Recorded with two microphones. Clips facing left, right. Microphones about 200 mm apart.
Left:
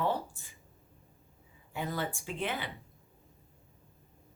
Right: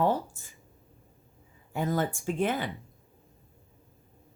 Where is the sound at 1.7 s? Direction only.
45° right (ahead or behind).